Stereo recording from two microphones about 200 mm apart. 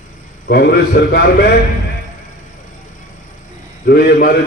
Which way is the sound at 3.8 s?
50° left (ahead or behind).